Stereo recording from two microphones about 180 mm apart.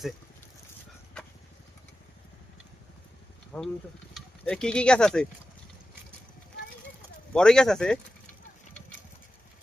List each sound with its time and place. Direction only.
3.5 s speech: 5° left (ahead or behind)
7.3 s speech: 5° left (ahead or behind)